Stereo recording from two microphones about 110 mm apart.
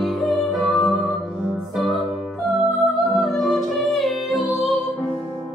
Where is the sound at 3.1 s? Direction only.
Centre (ahead or behind).